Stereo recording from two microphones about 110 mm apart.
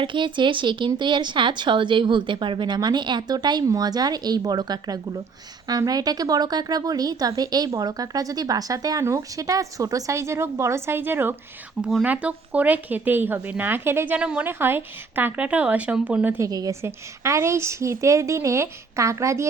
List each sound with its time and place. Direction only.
0.0 s speech: 50° right (ahead or behind); by 11.3 s 20° right (ahead or behind)
11.8 s speech: centre (ahead or behind)
12.0 s speech: 15° right (ahead or behind)
16.4 s a woman's voice: 35° right (ahead or behind)